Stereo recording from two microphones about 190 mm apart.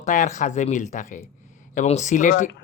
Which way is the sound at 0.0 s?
40° left (ahead or behind).